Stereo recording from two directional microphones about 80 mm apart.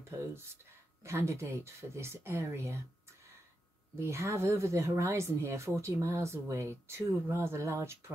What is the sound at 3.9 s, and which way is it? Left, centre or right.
Speech, right.